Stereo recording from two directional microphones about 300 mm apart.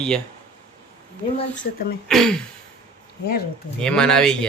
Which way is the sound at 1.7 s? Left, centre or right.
Left.